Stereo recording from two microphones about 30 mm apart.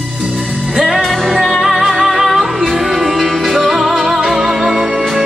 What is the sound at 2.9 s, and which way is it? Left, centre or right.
Music, centre.